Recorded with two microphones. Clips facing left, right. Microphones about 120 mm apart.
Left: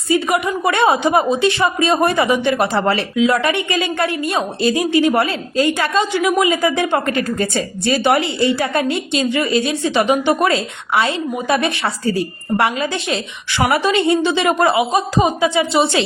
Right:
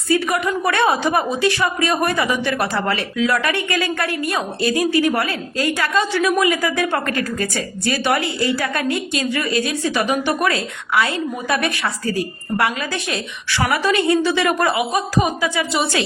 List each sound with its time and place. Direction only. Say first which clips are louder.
0.1 s a woman's voice: left 2 dB; 20° left (ahead or behind)